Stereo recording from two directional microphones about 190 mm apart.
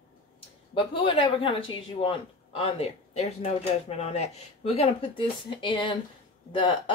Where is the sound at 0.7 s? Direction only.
25° left (ahead or behind).